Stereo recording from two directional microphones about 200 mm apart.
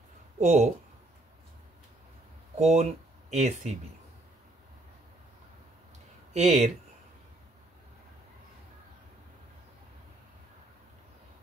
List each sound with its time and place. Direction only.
0.4 s speech: 35° right (ahead or behind)
2.5 s speech: 35° right (ahead or behind)
6.3 s speech: 35° right (ahead or behind)